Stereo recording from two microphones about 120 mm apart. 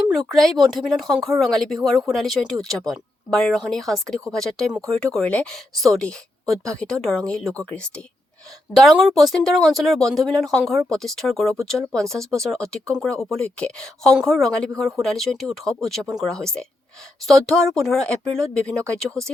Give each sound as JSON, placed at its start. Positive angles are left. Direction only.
{"t": 0.1, "sound": "speech", "side_deg": 0}
{"t": 8.7, "sound": "speech", "side_deg": 0}